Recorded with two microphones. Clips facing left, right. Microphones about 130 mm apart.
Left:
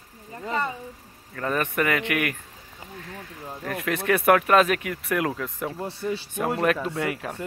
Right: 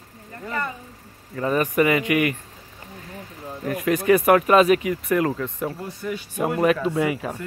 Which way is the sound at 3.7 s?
Centre (ahead or behind).